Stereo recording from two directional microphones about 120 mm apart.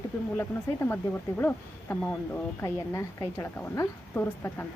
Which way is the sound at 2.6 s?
25° left (ahead or behind).